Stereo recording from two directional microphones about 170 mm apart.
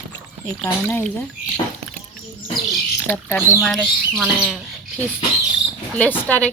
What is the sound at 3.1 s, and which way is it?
Speech, 10° left (ahead or behind).